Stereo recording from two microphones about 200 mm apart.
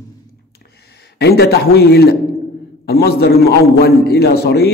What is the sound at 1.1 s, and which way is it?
A man's voice, 55° left (ahead or behind).